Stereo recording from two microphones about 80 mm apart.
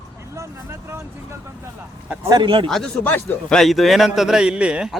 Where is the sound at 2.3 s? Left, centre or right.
Right.